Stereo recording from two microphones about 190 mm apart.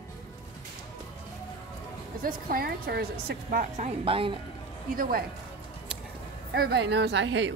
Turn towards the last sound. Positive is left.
turn(degrees=-70)  # may be behind; listen again after turning